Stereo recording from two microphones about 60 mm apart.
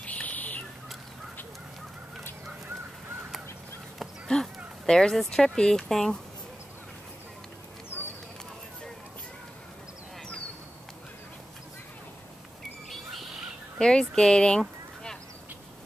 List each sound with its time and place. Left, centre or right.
0.0 s a sound: left
4.3 s speech: centre
13.7 s speech: centre